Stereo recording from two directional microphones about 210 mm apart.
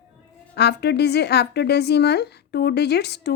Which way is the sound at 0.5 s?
50° left (ahead or behind).